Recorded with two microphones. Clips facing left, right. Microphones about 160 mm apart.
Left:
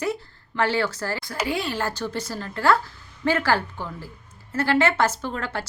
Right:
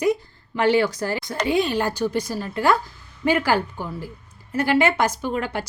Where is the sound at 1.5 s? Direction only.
20° right (ahead or behind).